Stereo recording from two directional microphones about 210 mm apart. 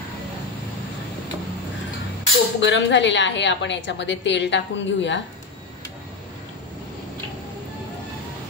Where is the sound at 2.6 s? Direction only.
60° left (ahead or behind).